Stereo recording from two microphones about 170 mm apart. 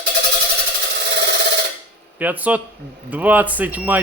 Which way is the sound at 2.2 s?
10° right (ahead or behind).